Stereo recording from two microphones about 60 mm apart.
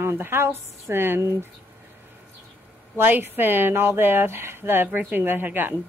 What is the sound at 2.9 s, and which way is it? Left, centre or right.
Speech, right.